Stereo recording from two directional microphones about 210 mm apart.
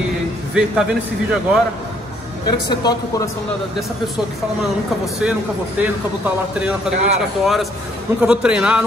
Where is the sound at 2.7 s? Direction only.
20° left (ahead or behind).